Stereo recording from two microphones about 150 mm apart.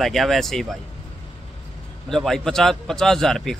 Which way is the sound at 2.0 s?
5° left (ahead or behind).